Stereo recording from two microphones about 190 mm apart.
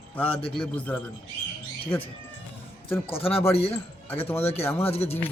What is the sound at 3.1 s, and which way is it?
Speech, 30° left (ahead or behind).